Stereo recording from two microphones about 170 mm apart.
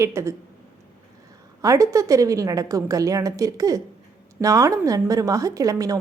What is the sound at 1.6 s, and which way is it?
A woman's voice, 20° right (ahead or behind).